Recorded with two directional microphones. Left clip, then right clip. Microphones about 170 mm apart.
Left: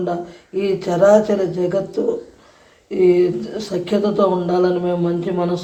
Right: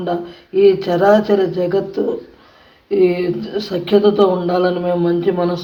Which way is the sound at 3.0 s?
15° left (ahead or behind).